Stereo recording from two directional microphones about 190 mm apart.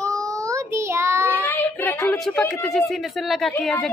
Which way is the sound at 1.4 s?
10° left (ahead or behind).